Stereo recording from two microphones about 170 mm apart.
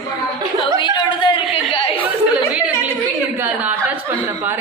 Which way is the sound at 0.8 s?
30° left (ahead or behind).